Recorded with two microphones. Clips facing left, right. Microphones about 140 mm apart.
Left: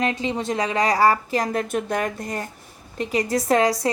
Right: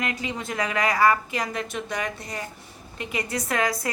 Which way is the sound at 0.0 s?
30° left (ahead or behind).